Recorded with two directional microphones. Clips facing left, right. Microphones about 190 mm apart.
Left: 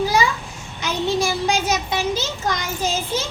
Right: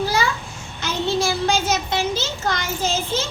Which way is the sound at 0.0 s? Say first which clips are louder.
Left 2 dB; 15° left (ahead or behind).